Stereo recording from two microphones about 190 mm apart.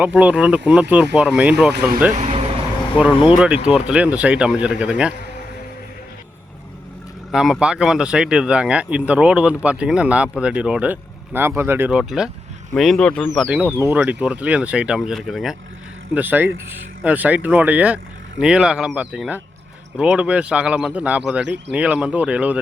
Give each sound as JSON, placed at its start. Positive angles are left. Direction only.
{"t": 0.0, "sound": "speech", "side_deg": -10}
{"t": 1.7, "sound": "speech", "side_deg": -55}
{"t": 2.1, "sound": "speech", "side_deg": -35}
{"t": 3.2, "sound": "speech", "side_deg": -5}
{"t": 7.3, "sound": "speech", "side_deg": 0}